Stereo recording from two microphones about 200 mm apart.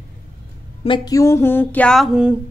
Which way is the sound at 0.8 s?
20° left (ahead or behind).